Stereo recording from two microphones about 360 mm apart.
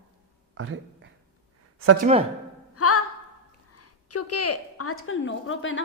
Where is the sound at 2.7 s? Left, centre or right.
Left.